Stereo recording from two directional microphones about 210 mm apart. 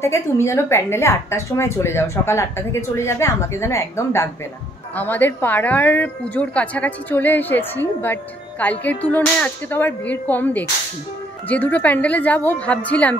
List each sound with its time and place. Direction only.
0.0 s a woman's voice: 10° left (ahead or behind)